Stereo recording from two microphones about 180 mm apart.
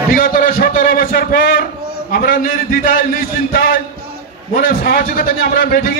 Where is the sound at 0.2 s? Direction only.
50° left (ahead or behind).